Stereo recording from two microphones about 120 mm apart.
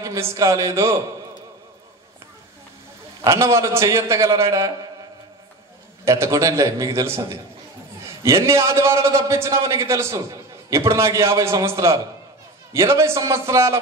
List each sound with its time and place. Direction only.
0.0 s a man's voice: 25° right (ahead or behind)
3.3 s a man's voice: 25° right (ahead or behind)
6.0 s a man's voice: 25° right (ahead or behind)